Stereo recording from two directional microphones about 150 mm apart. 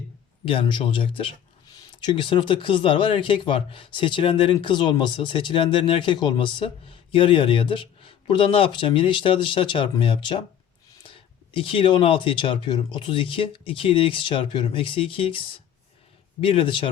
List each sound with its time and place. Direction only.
0.4 s speech: 35° left (ahead or behind)